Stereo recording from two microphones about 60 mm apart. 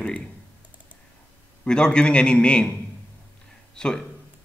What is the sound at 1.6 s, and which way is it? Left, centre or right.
A man's voice, centre.